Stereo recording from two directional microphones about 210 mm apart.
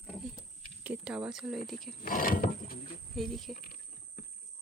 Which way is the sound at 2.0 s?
40° left (ahead or behind).